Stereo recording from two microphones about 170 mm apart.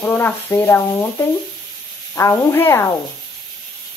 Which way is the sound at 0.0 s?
15° left (ahead or behind).